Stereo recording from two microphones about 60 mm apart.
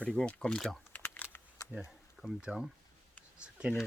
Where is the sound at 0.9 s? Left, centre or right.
Left.